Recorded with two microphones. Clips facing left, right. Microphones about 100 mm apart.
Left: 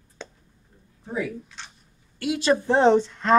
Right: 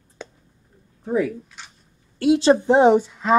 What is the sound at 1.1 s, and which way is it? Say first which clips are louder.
Speech: right 7 dB; 50° right (ahead or behind).